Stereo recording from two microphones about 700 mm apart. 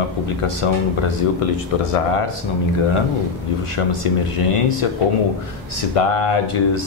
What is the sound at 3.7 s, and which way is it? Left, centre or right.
Speech, left.